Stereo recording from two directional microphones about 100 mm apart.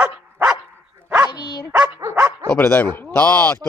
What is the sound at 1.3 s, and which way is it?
Dog, 45° left (ahead or behind).